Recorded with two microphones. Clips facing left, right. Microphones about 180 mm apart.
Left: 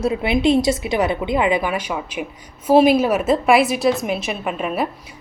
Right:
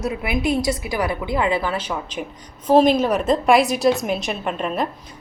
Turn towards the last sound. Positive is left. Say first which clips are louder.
# left 1 dB
turn(degrees=5)  # may be behind; listen again after turning